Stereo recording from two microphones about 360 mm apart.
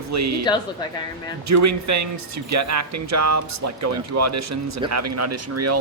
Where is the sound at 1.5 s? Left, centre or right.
Right.